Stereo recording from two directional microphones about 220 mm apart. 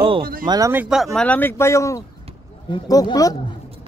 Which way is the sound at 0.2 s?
40° right (ahead or behind).